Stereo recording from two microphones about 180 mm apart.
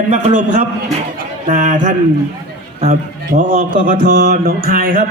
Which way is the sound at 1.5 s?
40° right (ahead or behind).